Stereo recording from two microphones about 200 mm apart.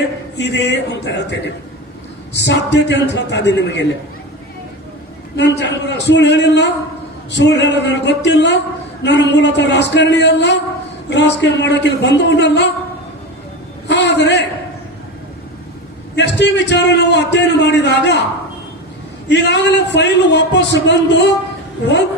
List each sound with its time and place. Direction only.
0.3 s a man's voice: 60° left (ahead or behind)
5.4 s a man's voice: 60° left (ahead or behind)
13.8 s a sound: 60° left (ahead or behind)
16.1 s a man's voice: 60° left (ahead or behind)
19.3 s a man's voice: 60° left (ahead or behind)